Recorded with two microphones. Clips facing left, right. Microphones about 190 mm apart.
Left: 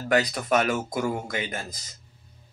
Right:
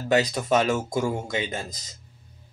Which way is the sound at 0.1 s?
25° right (ahead or behind).